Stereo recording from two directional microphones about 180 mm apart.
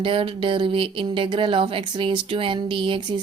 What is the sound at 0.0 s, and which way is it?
Speech, 30° right (ahead or behind).